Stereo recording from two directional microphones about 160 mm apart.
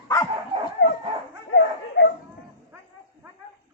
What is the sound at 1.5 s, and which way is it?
Dog, 90° left.